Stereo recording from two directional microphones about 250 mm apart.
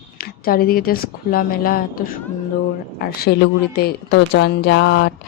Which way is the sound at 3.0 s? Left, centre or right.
Left.